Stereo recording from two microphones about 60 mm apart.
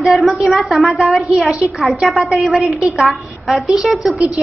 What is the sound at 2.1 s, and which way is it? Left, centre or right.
Speech, right.